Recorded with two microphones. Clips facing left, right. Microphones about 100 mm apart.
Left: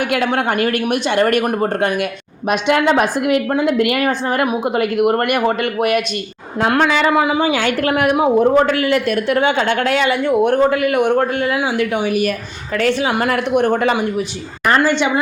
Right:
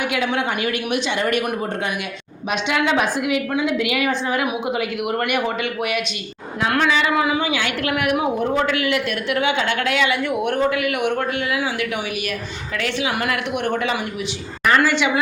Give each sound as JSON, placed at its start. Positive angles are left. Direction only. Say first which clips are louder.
{"t": 0.1, "sound": "a woman's voice", "louder": "left 5 dB", "side_deg": 50}
{"t": 2.5, "sound": "a woman's voice", "louder": "left 6 dB", "side_deg": 50}
{"t": 12.0, "sound": "a man's voice", "louder": "left 8 dB", "side_deg": 40}